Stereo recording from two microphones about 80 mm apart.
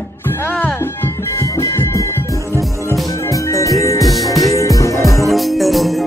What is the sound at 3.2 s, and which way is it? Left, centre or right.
Music, left.